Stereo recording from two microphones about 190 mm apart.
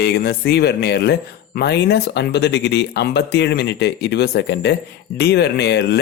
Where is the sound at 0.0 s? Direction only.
55° left (ahead or behind).